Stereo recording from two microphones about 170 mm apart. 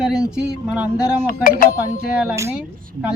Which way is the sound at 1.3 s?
55° left (ahead or behind).